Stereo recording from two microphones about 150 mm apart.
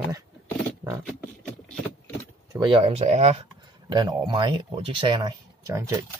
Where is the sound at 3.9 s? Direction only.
30° right (ahead or behind).